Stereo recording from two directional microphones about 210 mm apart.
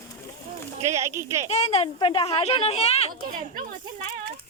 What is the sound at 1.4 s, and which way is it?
Speech, 30° left (ahead or behind).